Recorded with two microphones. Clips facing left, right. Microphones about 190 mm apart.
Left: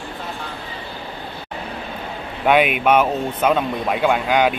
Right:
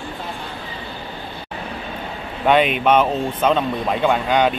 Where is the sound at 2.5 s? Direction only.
10° left (ahead or behind).